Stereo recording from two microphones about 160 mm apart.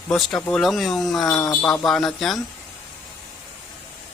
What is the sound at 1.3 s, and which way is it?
Speech, 20° left (ahead or behind).